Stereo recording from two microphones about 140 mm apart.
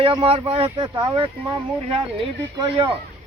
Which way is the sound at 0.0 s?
35° right (ahead or behind).